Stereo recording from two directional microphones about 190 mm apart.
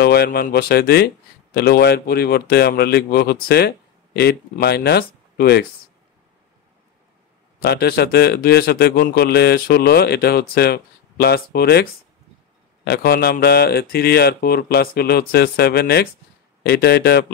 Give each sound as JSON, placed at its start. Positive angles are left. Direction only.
{"t": 0.0, "sound": "speech", "side_deg": 55}
{"t": 7.6, "sound": "speech", "side_deg": 55}